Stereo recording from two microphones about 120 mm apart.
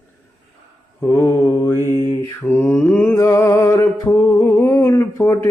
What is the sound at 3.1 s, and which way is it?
Music, 25° left (ahead or behind).